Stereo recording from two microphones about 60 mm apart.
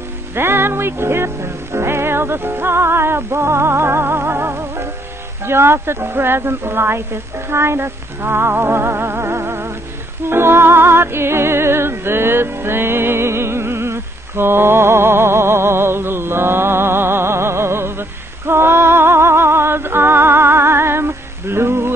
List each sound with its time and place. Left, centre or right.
0.3 s music: right
5.4 s speech: right
10.3 s music: right